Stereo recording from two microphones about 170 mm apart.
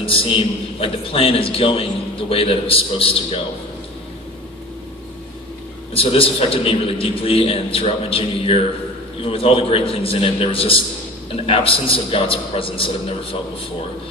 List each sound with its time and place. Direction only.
0.0 s a man's voice: 30° left (ahead or behind)
5.9 s a man's voice: 35° left (ahead or behind)